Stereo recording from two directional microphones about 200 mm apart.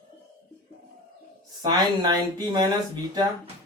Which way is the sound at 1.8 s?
20° right (ahead or behind).